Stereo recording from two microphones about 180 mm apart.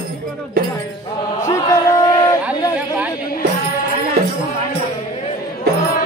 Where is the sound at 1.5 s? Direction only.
20° left (ahead or behind).